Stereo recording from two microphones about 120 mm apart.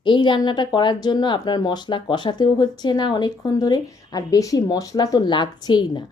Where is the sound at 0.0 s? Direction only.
40° left (ahead or behind).